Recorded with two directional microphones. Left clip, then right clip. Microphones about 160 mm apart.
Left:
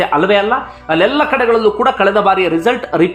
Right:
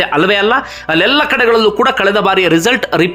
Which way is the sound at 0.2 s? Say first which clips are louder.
Right 1 dB; 20° right (ahead or behind).